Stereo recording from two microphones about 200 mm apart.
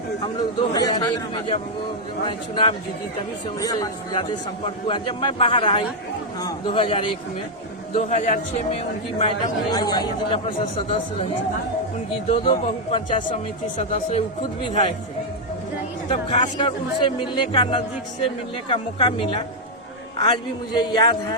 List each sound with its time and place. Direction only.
0.7 s a man's voice: 20° left (ahead or behind)
9.7 s a man's voice: 20° left (ahead or behind)
12.3 s a man's voice: 30° left (ahead or behind)
16.0 s a man's voice: 25° left (ahead or behind)